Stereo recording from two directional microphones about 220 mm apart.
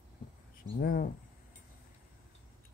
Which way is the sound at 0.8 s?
40° left (ahead or behind).